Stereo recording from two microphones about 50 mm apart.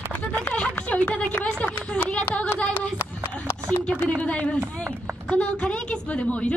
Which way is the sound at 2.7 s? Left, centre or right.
Left.